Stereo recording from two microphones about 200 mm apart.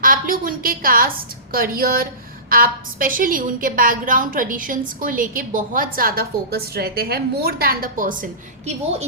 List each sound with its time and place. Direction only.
0.0 s a woman's voice: 45° right (ahead or behind)